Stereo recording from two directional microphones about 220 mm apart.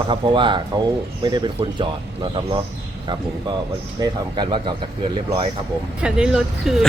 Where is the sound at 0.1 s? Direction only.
20° right (ahead or behind).